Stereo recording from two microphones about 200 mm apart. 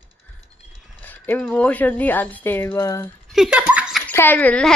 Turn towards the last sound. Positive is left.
turn(degrees=5)  # may be behind; listen again after turning